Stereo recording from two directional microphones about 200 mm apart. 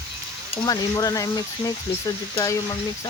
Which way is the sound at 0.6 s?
20° left (ahead or behind).